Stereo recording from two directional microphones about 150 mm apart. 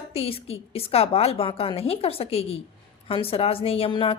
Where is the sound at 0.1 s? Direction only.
40° left (ahead or behind).